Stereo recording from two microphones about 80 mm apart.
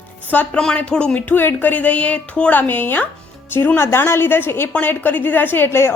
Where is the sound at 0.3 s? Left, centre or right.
Left.